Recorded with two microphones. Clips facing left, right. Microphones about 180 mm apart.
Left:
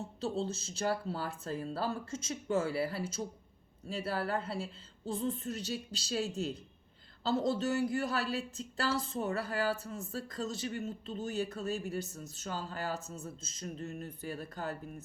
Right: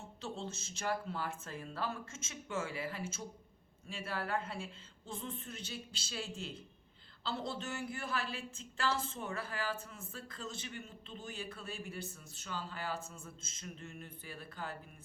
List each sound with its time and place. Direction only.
0.0 s a woman's voice: 35° left (ahead or behind)